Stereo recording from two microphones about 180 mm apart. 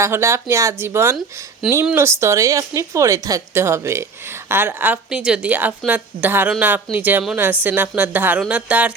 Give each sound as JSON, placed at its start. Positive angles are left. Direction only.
{"t": 0.0, "sound": "a woman's voice", "side_deg": -15}